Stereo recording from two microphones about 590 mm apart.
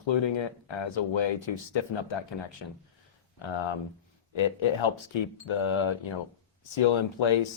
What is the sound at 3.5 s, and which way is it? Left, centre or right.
Speech, left.